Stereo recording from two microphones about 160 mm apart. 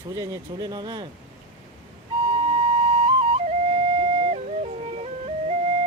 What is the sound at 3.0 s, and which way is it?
Flute, 40° right (ahead or behind).